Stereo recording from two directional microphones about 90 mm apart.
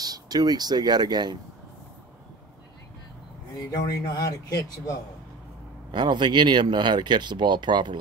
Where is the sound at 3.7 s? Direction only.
40° left (ahead or behind).